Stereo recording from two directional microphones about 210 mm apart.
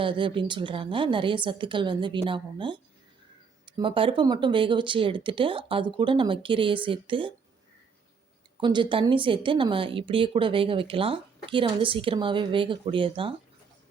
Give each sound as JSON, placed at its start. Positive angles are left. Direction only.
{"t": 0.0, "sound": "speech", "side_deg": -25}
{"t": 8.6, "sound": "speech", "side_deg": -20}